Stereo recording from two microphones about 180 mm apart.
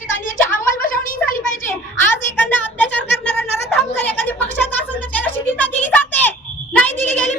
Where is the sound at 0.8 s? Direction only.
50° left (ahead or behind).